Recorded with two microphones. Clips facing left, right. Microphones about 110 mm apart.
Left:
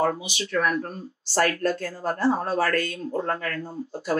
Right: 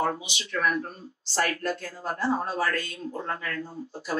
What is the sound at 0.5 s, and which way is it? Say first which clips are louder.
Speech: left 2 dB; 50° left (ahead or behind).